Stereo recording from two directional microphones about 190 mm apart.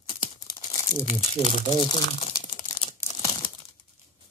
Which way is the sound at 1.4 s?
20° left (ahead or behind).